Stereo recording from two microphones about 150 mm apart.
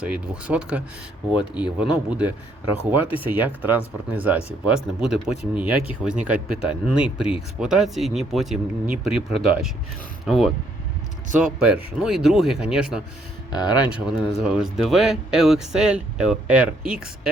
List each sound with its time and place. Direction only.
0.0 s speech: 10° right (ahead or behind)
11.6 s speech: 5° right (ahead or behind)
13.5 s speech: 25° left (ahead or behind)
13.9 s speech: 5° right (ahead or behind)